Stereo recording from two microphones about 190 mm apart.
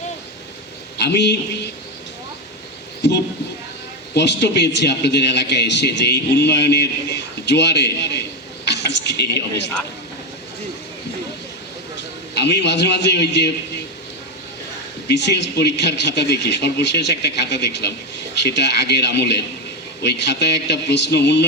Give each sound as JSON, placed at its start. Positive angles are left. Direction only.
{"t": 0.9, "sound": "a man's voice", "side_deg": 65}
{"t": 4.1, "sound": "a man's voice", "side_deg": 65}
{"t": 8.6, "sound": "a sound", "side_deg": 65}
{"t": 12.3, "sound": "a man's voice", "side_deg": 65}
{"t": 15.0, "sound": "a man's voice", "side_deg": 65}